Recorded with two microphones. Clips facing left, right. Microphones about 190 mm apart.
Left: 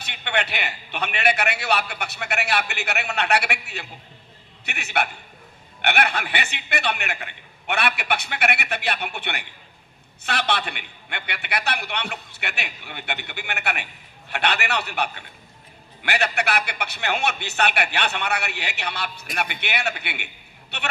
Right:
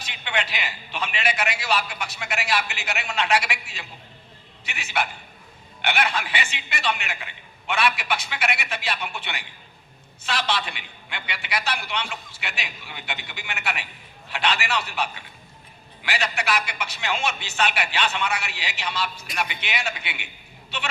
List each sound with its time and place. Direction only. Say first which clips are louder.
0.0 s a man's voice: left 2 dB; 60° left (ahead or behind)